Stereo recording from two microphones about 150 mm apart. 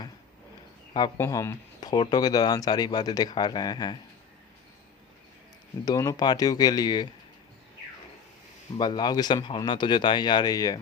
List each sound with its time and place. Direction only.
0.9 s speech: 25° left (ahead or behind)
5.8 s speech: 25° left (ahead or behind)
8.8 s speech: 30° left (ahead or behind)